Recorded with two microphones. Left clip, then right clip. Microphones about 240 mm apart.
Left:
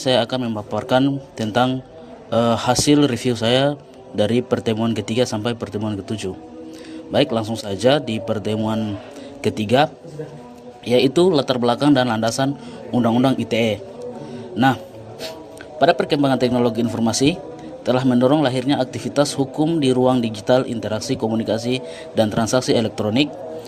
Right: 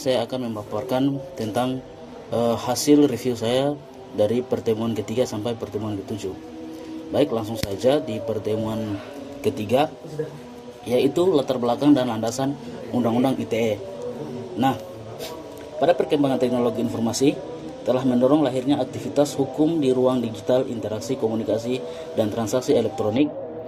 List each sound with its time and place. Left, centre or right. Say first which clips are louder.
0.0 s speech: left 5 dB; left
15.8 s a man's voice: left 3 dB; left